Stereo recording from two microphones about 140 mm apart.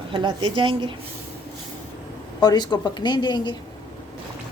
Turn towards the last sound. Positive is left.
turn(degrees=30)  # may be behind; listen again after turning